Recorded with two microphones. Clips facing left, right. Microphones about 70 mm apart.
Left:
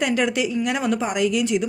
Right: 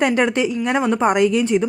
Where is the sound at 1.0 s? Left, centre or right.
Right.